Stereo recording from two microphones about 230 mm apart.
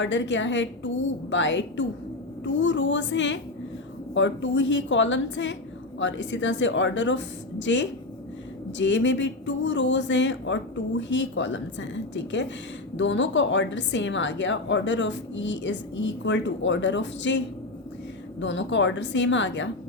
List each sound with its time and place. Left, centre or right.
0.0 s a woman's voice: left